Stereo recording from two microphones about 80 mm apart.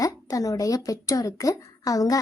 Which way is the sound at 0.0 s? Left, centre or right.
Left.